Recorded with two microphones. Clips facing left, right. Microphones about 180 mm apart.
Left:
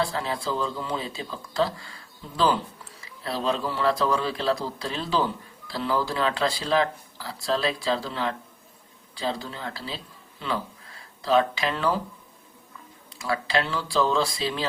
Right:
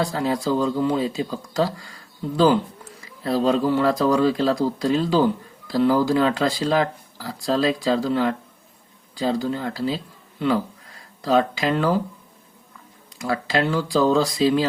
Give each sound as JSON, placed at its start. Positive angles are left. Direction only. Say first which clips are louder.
{"t": 0.2, "sound": "speech", "louder": "right 7 dB", "side_deg": -40}
{"t": 11.2, "sound": "speech", "louder": "right 3 dB", "side_deg": -45}
{"t": 13.2, "sound": "speech", "louder": "right 4 dB", "side_deg": -45}